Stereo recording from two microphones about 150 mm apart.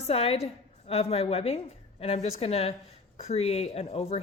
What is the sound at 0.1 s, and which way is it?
A woman's voice, 40° left (ahead or behind).